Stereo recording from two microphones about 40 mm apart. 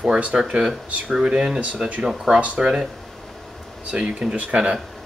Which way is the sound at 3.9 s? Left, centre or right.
Right.